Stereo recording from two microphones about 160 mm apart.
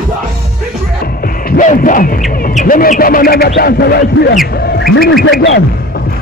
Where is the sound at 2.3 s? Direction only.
65° left (ahead or behind).